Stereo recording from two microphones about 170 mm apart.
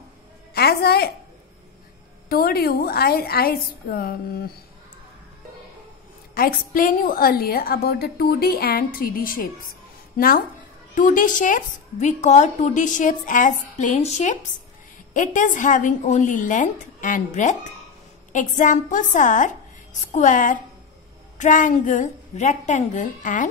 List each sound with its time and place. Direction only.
0.6 s a woman's voice: 70° left (ahead or behind)
2.2 s a woman's voice: 60° left (ahead or behind)
6.3 s a woman's voice: 60° left (ahead or behind)